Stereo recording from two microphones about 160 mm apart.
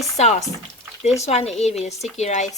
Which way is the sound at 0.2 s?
45° left (ahead or behind).